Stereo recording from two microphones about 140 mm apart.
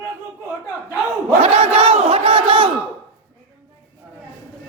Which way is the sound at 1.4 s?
45° right (ahead or behind).